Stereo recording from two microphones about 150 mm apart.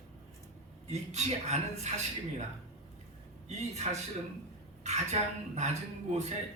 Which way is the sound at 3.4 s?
50° right (ahead or behind).